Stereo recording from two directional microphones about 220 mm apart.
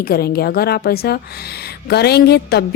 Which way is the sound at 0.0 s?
45° left (ahead or behind).